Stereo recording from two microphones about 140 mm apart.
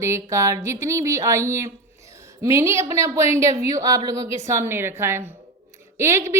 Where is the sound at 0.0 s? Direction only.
20° right (ahead or behind).